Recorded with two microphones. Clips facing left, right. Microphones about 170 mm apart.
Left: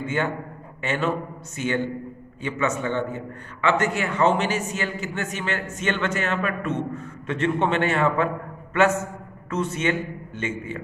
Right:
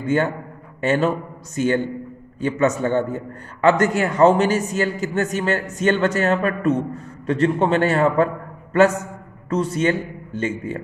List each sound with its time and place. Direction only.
0.0 s a man's voice: 40° right (ahead or behind)